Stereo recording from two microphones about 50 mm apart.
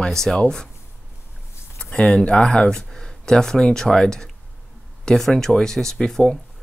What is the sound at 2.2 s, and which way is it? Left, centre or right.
Speech, left.